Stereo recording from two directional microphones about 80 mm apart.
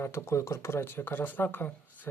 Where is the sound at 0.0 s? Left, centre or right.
Left.